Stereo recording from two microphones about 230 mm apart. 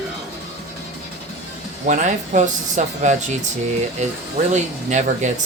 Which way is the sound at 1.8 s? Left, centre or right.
Right.